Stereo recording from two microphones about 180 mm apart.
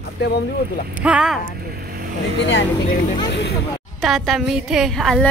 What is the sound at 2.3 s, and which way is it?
Speech, 90° left.